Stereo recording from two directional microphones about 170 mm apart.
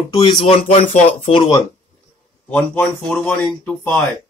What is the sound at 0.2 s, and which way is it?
Speech, 30° left (ahead or behind).